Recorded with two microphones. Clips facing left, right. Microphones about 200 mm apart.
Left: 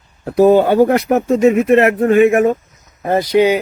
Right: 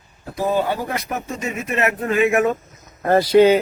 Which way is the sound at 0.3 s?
70° left (ahead or behind).